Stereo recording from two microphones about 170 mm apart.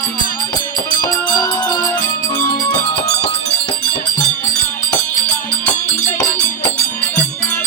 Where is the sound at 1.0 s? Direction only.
20° left (ahead or behind).